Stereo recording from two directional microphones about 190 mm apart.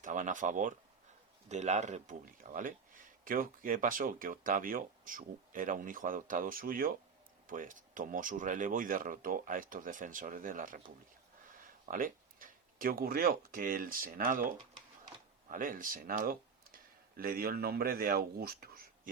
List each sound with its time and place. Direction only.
0.0 s speech: 45° right (ahead or behind)